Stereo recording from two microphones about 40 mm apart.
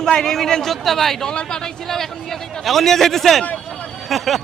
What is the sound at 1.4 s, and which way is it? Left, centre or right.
A man's voice, centre.